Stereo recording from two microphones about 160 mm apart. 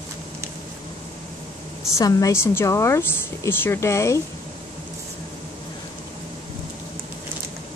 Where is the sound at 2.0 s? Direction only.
20° left (ahead or behind).